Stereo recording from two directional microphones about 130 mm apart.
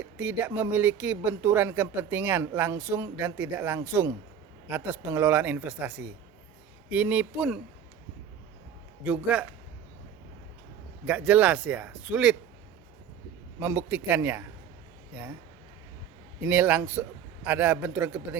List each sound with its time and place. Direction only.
0.0 s speech: 15° right (ahead or behind)
9.0 s speech: 10° right (ahead or behind)
11.0 s speech: 10° right (ahead or behind)
13.6 s speech: 15° right (ahead or behind)
16.4 s speech: 15° right (ahead or behind)